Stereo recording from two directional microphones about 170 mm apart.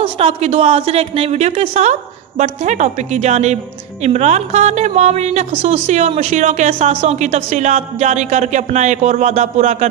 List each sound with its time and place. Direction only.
0.0 s a woman's voice: 35° right (ahead or behind)